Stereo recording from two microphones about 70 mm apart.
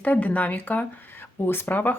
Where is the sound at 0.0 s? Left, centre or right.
Left.